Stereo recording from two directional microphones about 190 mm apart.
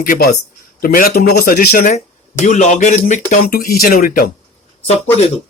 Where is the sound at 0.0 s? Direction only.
50° left (ahead or behind).